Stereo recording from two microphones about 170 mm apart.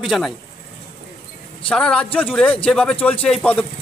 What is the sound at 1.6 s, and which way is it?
A man's voice, 5° left (ahead or behind).